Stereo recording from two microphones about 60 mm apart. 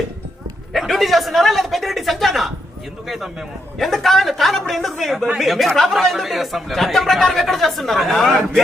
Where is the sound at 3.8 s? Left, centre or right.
Centre.